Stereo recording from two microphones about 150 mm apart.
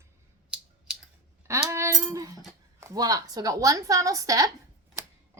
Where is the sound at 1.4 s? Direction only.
20° right (ahead or behind).